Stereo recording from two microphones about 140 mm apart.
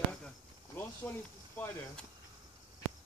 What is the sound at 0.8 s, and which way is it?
Speech, 15° left (ahead or behind).